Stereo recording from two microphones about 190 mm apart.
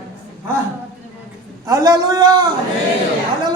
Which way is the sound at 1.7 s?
20° right (ahead or behind).